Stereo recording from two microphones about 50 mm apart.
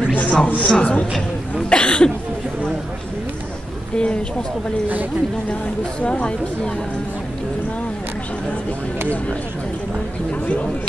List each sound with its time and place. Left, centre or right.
0.1 s a sound: left
0.6 s a woman's voice: left
1.7 s cough: centre
4.0 s a woman's voice: centre
5.5 s a woman's voice: left